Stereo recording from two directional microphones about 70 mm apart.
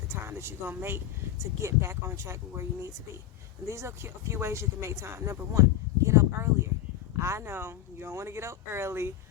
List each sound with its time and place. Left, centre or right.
0.1 s speech: right
6.1 s a sound: right
7.2 s speech: right